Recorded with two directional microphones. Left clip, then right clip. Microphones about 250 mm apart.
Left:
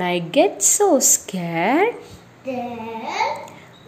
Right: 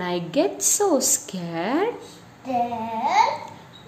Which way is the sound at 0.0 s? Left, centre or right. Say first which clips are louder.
Left 6 dB; centre.